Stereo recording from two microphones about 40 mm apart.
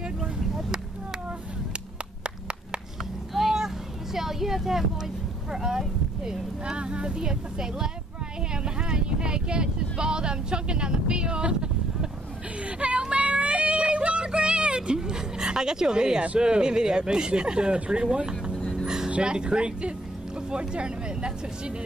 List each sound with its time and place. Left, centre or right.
0.0 s vehicle: centre
2.2 s clapping: right
3.3 s a sound: centre
6.6 s speech: right
12.6 s a sound: right
13.1 s child singing: right
16.3 s speech: right
18.5 s vehicle: left
18.9 s a sound: centre
19.1 s speech: right